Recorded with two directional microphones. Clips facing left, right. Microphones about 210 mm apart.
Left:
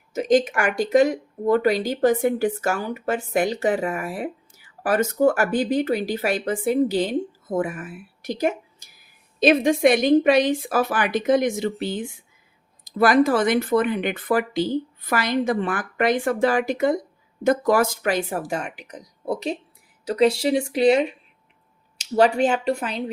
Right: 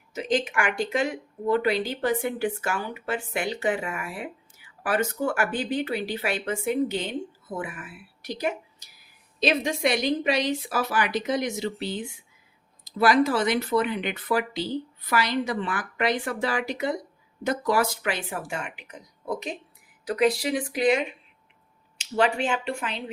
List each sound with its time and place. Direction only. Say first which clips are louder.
0.1 s speech: left 7 dB; 45° left (ahead or behind)